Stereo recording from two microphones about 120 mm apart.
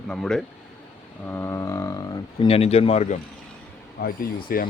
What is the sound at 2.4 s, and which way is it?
Speech, 55° left (ahead or behind).